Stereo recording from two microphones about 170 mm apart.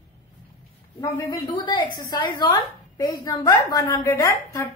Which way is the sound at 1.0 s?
25° left (ahead or behind).